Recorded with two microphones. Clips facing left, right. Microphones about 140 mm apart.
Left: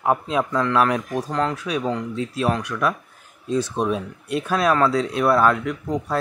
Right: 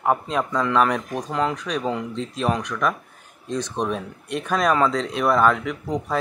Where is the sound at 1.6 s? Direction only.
5° left (ahead or behind).